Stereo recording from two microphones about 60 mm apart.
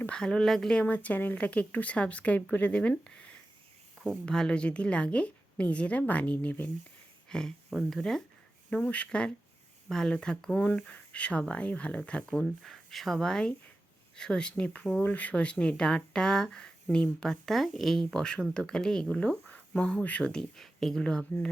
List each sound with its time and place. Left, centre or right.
0.1 s speech: centre
0.8 s a woman's voice: left
3.1 s a sound: centre
4.1 s a woman's voice: centre
7.3 s speech: centre
8.7 s a woman's voice: left
10.6 s a woman's voice: left
19.5 s speech: left
20.4 s speech: centre